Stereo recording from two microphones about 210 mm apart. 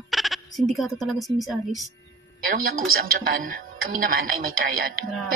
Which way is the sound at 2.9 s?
40° right (ahead or behind).